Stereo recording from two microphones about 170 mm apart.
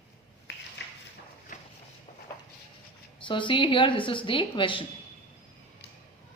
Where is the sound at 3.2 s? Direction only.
30° left (ahead or behind).